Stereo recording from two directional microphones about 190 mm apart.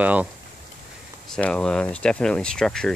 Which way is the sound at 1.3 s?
5° left (ahead or behind).